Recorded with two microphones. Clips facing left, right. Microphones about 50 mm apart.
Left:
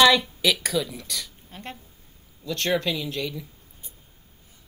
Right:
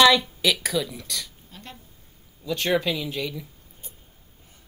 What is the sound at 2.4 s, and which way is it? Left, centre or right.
Speech, centre.